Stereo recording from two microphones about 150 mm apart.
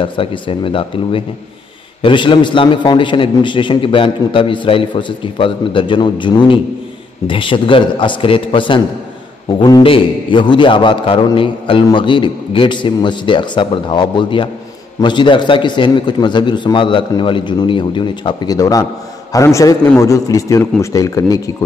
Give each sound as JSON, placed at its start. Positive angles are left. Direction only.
{"t": 0.0, "sound": "a man's voice", "side_deg": 35}